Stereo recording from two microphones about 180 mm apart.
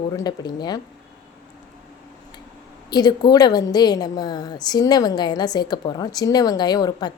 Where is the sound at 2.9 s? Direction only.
25° left (ahead or behind).